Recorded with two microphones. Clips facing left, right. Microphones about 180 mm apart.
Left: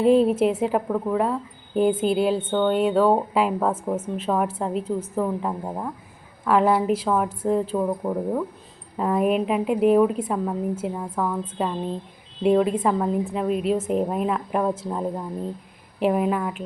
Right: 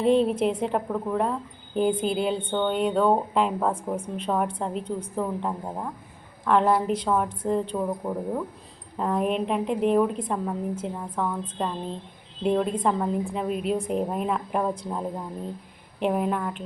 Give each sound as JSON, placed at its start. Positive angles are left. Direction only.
{"t": 0.0, "sound": "speech", "side_deg": 5}